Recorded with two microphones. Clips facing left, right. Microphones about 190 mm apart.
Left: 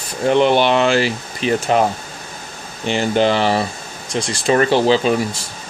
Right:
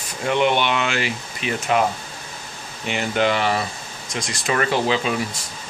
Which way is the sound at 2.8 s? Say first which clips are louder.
Left 5 dB; 30° left (ahead or behind).